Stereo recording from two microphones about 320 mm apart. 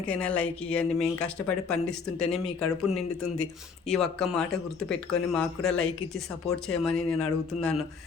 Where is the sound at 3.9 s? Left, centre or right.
Centre.